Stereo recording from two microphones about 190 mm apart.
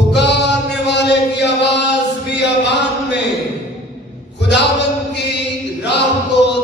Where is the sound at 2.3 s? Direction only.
65° left (ahead or behind).